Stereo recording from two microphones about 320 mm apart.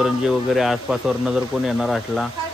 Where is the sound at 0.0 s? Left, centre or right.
Centre.